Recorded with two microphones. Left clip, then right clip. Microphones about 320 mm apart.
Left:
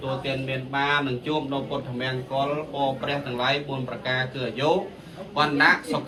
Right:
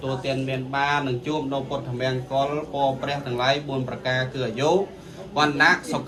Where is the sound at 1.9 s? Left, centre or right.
Right.